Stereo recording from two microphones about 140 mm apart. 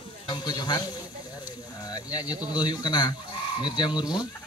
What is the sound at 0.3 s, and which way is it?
Speech, 30° left (ahead or behind).